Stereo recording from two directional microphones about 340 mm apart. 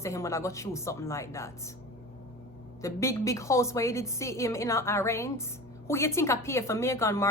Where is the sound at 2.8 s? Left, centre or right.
Centre.